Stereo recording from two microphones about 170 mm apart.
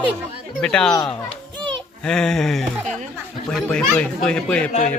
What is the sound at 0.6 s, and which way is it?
Speech, 5° left (ahead or behind).